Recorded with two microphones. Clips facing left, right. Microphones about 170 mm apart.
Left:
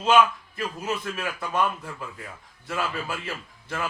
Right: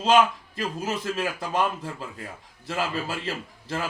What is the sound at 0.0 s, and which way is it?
A man's voice, 30° right (ahead or behind).